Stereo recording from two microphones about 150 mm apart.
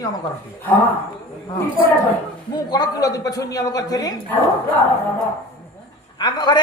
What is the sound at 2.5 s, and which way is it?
A man's voice, 30° left (ahead or behind).